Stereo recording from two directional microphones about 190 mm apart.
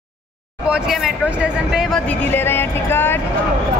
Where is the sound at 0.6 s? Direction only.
5° right (ahead or behind).